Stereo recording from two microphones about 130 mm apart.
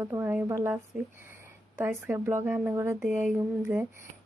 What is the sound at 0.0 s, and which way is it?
Speech, 20° right (ahead or behind).